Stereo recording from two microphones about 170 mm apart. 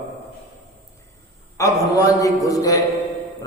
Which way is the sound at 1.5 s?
20° left (ahead or behind).